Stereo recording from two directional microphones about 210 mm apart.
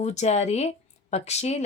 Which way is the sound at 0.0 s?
30° left (ahead or behind).